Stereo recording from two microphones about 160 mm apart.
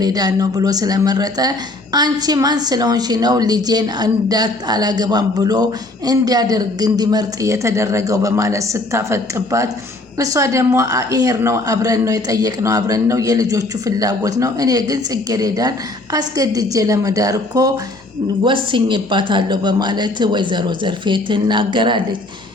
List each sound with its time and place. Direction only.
0.0 s speech: 25° right (ahead or behind)